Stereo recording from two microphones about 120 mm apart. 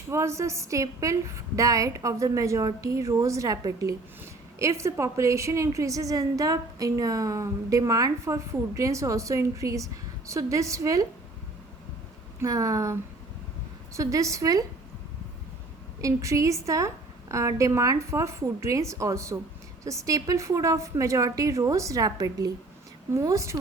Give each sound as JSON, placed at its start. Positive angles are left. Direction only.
{"t": 0.1, "sound": "a woman's voice", "side_deg": -25}
{"t": 12.4, "sound": "a woman's voice", "side_deg": -30}
{"t": 16.0, "sound": "a woman's voice", "side_deg": -25}